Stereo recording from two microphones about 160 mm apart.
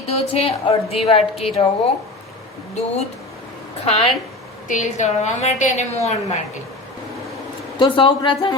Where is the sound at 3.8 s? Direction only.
40° left (ahead or behind).